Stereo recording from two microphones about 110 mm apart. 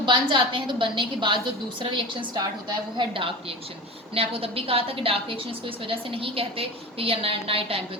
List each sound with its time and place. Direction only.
0.0 s a woman's voice: 45° right (ahead or behind)